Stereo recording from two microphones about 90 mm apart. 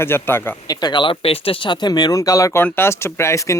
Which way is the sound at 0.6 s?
55° left (ahead or behind).